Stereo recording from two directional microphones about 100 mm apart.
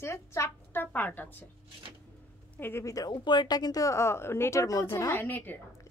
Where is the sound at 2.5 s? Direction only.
20° left (ahead or behind).